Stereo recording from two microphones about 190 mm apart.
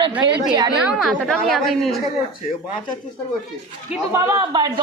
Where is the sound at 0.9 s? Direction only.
Centre (ahead or behind).